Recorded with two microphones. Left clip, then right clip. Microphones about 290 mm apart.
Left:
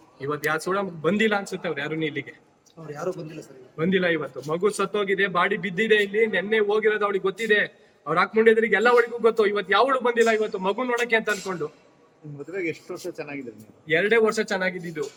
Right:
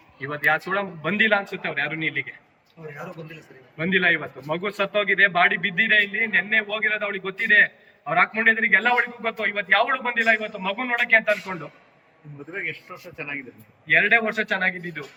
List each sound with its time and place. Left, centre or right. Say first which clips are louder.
0.2 s a man's voice: right 4 dB; centre
3.8 s a man's voice: right 2 dB; centre
13.8 s a man's voice: right 2 dB; centre